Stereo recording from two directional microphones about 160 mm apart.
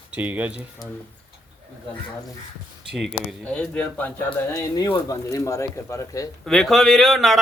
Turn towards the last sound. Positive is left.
turn(degrees=0)  # may be behind; listen again after turning